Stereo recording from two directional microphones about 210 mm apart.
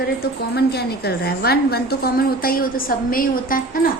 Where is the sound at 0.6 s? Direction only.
50° left (ahead or behind).